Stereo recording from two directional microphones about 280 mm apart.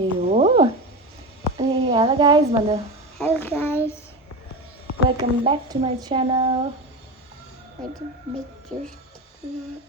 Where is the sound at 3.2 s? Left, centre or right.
Centre.